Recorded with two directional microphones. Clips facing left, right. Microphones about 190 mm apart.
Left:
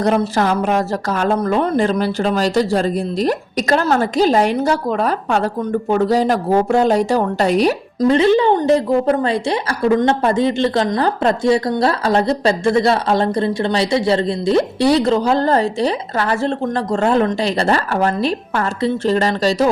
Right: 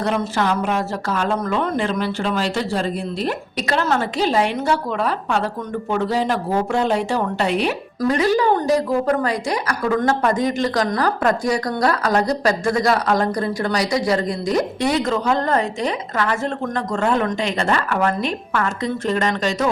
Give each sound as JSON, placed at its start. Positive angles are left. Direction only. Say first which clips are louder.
{"t": 0.0, "sound": "speech", "louder": "left 5 dB", "side_deg": 40}
{"t": 8.0, "sound": "a woman's voice", "louder": "left 5 dB", "side_deg": 25}